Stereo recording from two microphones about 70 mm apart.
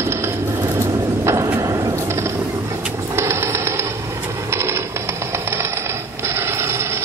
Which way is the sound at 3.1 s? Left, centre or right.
Right.